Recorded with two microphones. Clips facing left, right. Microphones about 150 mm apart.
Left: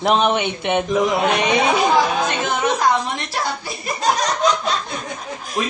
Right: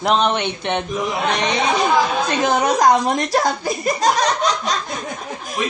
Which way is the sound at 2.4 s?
40° right (ahead or behind).